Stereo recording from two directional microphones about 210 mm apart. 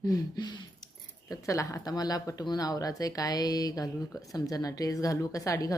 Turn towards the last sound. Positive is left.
turn(degrees=15)  # may be behind; listen again after turning